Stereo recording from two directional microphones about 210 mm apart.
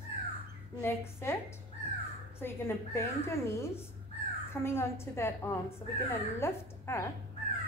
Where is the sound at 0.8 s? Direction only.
10° left (ahead or behind).